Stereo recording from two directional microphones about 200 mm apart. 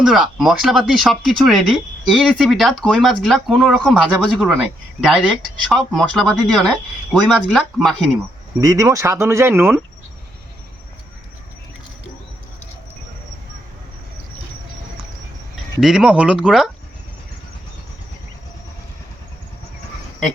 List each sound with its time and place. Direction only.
0.0 s speech: centre (ahead or behind)
8.6 s speech: 15° right (ahead or behind)
15.8 s speech: 5° right (ahead or behind)